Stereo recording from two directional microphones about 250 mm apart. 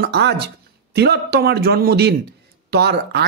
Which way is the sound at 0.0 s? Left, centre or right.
Right.